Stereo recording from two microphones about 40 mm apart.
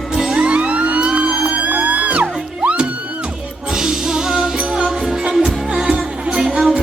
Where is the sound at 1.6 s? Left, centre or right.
Right.